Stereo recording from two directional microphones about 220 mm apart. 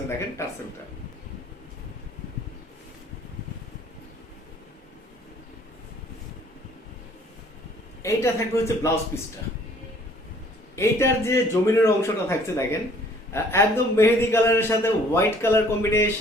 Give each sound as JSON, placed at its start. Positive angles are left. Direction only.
{"t": 0.4, "sound": "a man's voice", "side_deg": 10}
{"t": 8.0, "sound": "a man's voice", "side_deg": 10}
{"t": 10.8, "sound": "a man's voice", "side_deg": 10}